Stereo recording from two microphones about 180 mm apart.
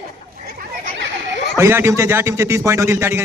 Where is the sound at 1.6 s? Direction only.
15° right (ahead or behind).